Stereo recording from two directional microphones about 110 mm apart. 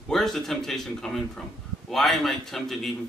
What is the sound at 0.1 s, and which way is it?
A man's voice, 5° left (ahead or behind).